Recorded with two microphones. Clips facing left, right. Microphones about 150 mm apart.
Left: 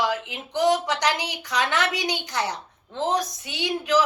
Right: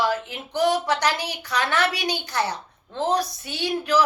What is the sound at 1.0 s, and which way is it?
Speech, 15° left (ahead or behind).